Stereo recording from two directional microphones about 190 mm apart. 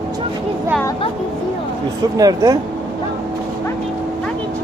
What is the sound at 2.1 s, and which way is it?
Speech, 20° right (ahead or behind).